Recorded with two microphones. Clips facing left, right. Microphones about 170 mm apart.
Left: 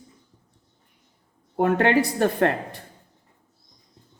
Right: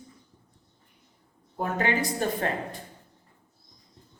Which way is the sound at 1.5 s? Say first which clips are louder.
Left 8 dB; 70° left (ahead or behind).